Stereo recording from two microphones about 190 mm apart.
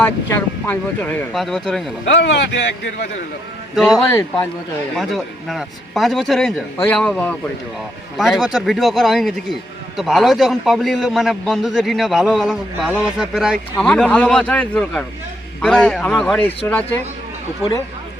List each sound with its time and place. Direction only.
0.0 s speech: 15° left (ahead or behind)
1.3 s a man's voice: centre (ahead or behind)
2.0 s speech: 70° left (ahead or behind)
3.8 s a man's voice: centre (ahead or behind)
4.1 s speech: 20° left (ahead or behind)
4.9 s a man's voice: centre (ahead or behind)